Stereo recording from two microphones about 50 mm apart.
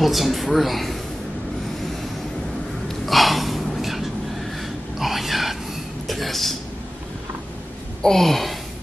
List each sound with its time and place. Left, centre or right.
0.0 s a woman's voice: centre
3.1 s gasp: centre
6.0 s a sound: centre
8.0 s a woman's voice: centre